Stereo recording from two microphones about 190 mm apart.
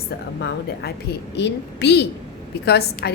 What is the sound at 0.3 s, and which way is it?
A woman's voice, 65° left (ahead or behind).